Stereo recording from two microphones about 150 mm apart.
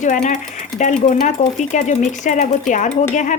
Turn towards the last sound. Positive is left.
turn(degrees=55)  # may be behind; listen again after turning